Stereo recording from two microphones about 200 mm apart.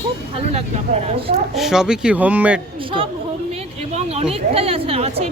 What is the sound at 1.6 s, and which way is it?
Speech, centre (ahead or behind).